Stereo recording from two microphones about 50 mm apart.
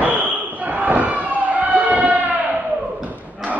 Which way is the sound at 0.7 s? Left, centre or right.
Right.